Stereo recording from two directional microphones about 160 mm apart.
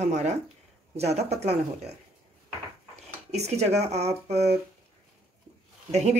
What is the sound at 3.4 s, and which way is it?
A woman's voice, 45° right (ahead or behind).